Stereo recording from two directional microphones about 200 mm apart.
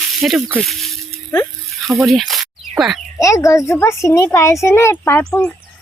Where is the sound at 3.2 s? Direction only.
15° left (ahead or behind).